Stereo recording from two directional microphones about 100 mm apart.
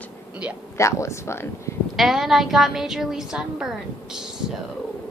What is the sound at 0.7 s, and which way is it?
Speech, 30° left (ahead or behind).